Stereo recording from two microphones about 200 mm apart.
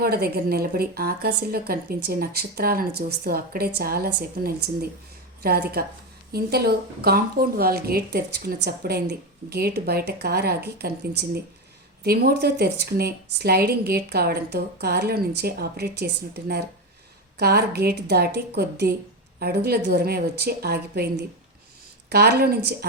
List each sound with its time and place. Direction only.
0.0 s a woman's voice: 50° right (ahead or behind)